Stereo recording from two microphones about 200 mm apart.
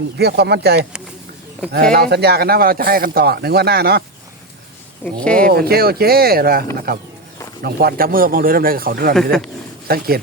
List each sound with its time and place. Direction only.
0.2 s speech: 55° right (ahead or behind)
5.2 s speech: 5° left (ahead or behind)
5.5 s speech: 50° right (ahead or behind)